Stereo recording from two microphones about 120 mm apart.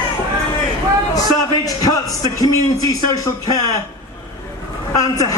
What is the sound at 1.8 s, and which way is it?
A man's voice, 30° left (ahead or behind).